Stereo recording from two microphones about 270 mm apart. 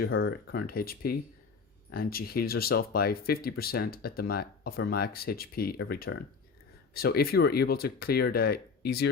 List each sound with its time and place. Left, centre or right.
0.1 s speech: left